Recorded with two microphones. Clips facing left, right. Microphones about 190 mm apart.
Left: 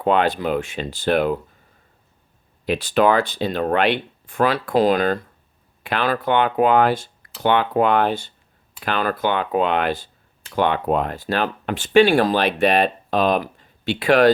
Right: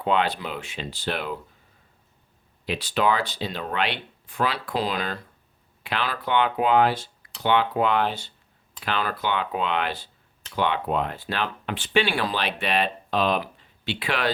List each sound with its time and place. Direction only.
0.0 s speech: 50° left (ahead or behind)
2.6 s speech: 50° left (ahead or behind)